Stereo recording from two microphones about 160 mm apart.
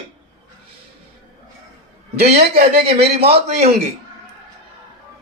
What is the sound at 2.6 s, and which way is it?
A man's voice, 40° right (ahead or behind).